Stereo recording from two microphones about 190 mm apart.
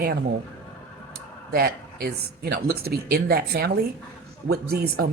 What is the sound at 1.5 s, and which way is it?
A woman's voice, 55° right (ahead or behind).